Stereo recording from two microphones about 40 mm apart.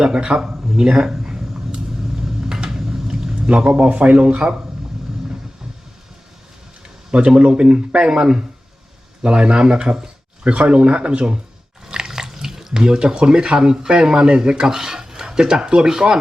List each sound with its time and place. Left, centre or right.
0.0 s a sound: centre
2.2 s vehicle: centre
3.8 s speech: right
7.1 s speech: right
11.9 s speech: centre